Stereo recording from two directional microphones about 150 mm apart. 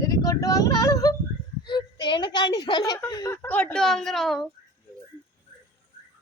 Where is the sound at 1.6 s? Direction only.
30° left (ahead or behind).